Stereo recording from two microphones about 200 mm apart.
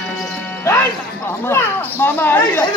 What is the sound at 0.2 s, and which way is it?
Music, 5° left (ahead or behind).